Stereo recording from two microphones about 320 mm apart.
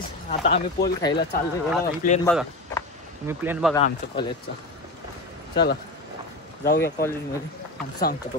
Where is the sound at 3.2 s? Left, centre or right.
Centre.